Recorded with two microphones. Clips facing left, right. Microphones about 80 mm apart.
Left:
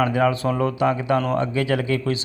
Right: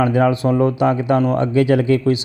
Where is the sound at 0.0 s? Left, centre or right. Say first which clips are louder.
Right 4 dB; right.